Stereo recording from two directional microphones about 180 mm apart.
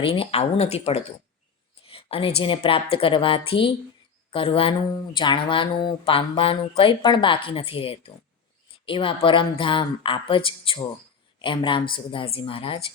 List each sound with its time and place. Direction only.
0.0 s speech: 30° left (ahead or behind)